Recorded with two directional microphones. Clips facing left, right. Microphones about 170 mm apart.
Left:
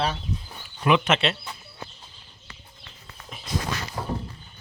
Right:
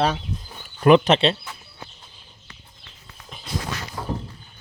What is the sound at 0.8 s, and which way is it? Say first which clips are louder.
Speech: right 6 dB; 40° right (ahead or behind).